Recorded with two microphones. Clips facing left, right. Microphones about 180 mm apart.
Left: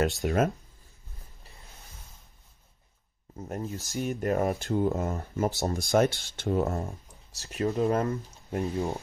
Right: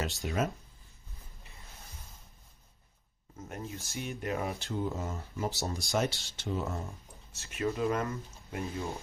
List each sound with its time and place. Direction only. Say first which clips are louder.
0.2 s speech: left 8 dB; 50° left (ahead or behind)
3.3 s speech: left 6 dB; 35° left (ahead or behind)
6.9 s speech: left 5 dB; 35° left (ahead or behind)